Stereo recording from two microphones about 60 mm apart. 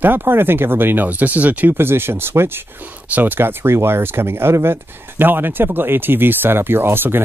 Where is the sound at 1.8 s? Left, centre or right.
Right.